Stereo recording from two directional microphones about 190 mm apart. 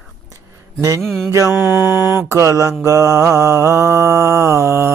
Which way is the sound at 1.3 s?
15° right (ahead or behind).